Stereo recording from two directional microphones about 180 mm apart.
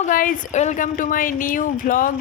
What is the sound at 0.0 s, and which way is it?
A woman's voice, 50° left (ahead or behind).